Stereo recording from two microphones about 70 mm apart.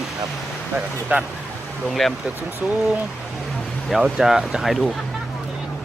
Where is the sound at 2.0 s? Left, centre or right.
Centre.